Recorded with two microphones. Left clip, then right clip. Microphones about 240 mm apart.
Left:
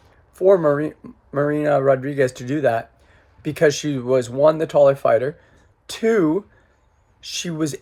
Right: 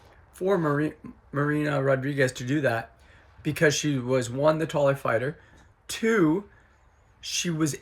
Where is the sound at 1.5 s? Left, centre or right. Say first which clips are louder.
Left 8 dB; centre.